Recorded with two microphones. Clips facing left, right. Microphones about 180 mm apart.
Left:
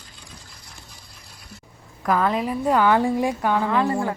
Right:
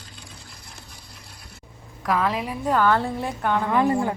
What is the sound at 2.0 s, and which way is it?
Speech, centre (ahead or behind).